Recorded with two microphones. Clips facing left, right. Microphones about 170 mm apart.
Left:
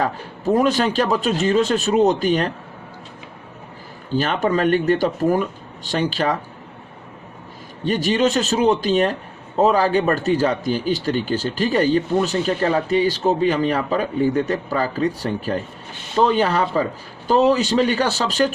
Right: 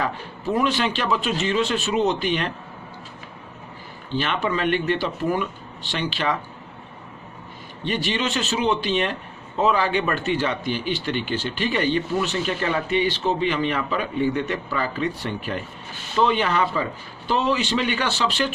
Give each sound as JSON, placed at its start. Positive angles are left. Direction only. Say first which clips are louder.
{"t": 0.0, "sound": "a man's voice", "louder": "left 4 dB", "side_deg": 40}
{"t": 4.1, "sound": "speech", "louder": "left 5 dB", "side_deg": 40}
{"t": 7.9, "sound": "a man's voice", "louder": "left 7 dB", "side_deg": 40}